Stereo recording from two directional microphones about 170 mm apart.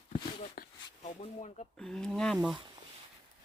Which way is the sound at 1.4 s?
40° left (ahead or behind).